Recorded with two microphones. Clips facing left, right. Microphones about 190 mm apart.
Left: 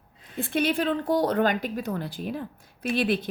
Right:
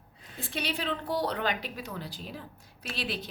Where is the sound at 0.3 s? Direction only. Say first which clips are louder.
Left 10 dB; 55° left (ahead or behind).